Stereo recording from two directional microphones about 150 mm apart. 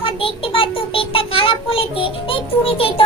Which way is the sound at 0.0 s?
35° left (ahead or behind).